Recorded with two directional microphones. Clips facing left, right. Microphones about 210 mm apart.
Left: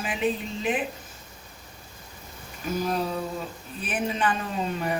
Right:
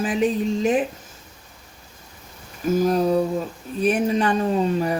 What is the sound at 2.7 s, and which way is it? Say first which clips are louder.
Speech: right 9 dB; 45° right (ahead or behind).